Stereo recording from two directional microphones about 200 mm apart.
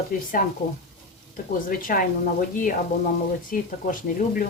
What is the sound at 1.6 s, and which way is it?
Speech, 45° left (ahead or behind).